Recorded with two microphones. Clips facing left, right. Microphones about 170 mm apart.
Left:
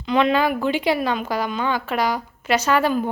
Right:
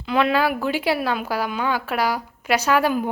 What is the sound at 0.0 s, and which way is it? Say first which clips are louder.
A woman's voice: left 1 dB; 5° right (ahead or behind).